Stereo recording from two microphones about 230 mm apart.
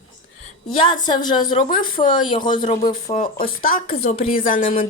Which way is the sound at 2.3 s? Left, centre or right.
Centre.